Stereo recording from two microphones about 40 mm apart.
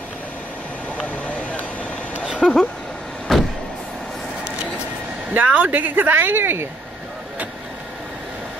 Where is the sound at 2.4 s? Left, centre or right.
Centre.